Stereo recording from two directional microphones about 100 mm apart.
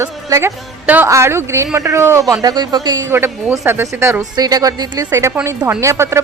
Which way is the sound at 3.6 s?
25° right (ahead or behind).